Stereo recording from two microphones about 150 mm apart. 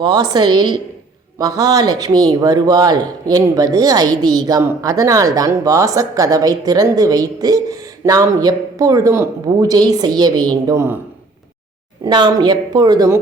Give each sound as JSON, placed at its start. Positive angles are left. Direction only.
{"t": 0.0, "sound": "speech", "side_deg": -25}
{"t": 12.0, "sound": "speech", "side_deg": -30}